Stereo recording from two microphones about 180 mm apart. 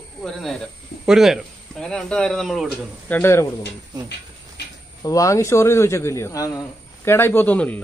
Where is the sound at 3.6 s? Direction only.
70° left (ahead or behind).